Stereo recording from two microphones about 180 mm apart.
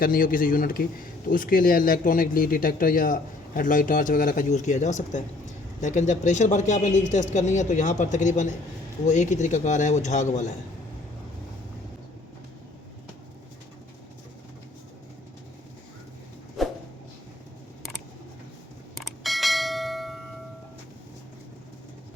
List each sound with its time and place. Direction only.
0.0 s a man's voice: 55° left (ahead or behind)
16.6 s a sound: centre (ahead or behind)
18.9 s bell: centre (ahead or behind)